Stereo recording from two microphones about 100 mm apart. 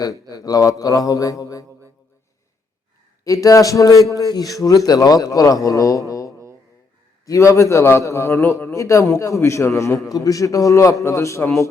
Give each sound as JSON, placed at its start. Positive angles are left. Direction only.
{"t": 0.0, "sound": "a man's voice", "side_deg": 35}
{"t": 3.2, "sound": "a man's voice", "side_deg": 35}